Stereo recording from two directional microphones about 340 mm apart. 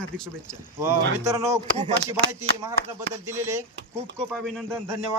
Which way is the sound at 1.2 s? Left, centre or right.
Centre.